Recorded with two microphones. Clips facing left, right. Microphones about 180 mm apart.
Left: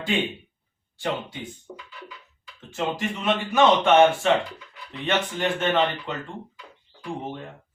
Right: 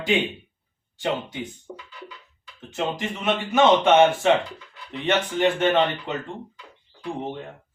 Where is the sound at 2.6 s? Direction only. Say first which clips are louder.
Even; 20° right (ahead or behind).